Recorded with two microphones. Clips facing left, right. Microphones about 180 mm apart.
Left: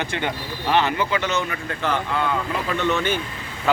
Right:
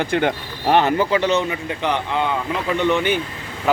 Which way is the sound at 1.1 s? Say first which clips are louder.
Right 6 dB; 30° right (ahead or behind).